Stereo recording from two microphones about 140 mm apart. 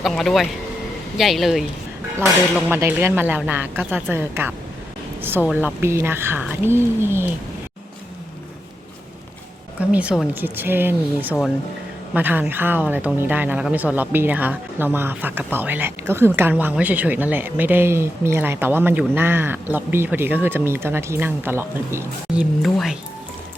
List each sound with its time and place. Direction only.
0.0 s speech: centre (ahead or behind)
2.6 s speech: 15° right (ahead or behind)
9.9 s speech: 10° right (ahead or behind)
22.4 s speech: centre (ahead or behind)